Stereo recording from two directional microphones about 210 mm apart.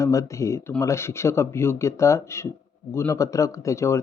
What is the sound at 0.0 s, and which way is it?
Speech, 15° left (ahead or behind).